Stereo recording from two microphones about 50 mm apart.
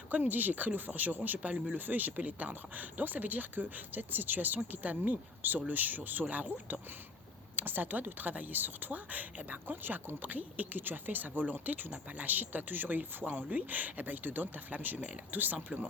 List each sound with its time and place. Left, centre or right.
0.1 s speech: right